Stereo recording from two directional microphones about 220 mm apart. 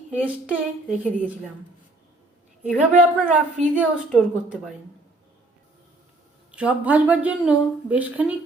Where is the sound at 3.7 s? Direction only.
5° right (ahead or behind).